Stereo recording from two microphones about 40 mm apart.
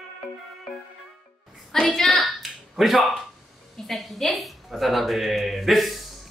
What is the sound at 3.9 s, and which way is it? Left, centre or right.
A woman's voice, centre.